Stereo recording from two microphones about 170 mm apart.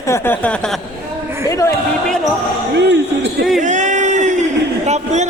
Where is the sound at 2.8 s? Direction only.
85° right.